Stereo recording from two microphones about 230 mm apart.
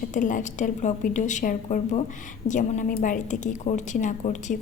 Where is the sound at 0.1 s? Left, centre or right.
Left.